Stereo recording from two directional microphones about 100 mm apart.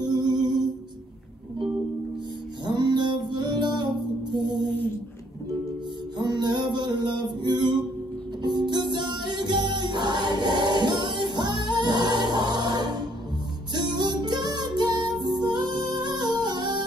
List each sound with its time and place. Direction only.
0.0 s music: 45° right (ahead or behind)
2.6 s music: 45° right (ahead or behind)
6.1 s music: 45° right (ahead or behind)